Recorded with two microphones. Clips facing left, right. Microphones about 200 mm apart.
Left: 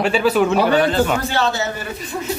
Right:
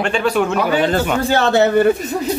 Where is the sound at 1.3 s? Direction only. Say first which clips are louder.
Right 8 dB; 60° right (ahead or behind).